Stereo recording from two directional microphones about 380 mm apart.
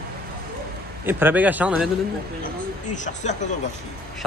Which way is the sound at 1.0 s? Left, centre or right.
Centre.